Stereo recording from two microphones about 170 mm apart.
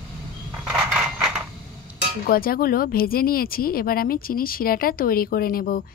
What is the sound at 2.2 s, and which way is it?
Speech, 60° left (ahead or behind).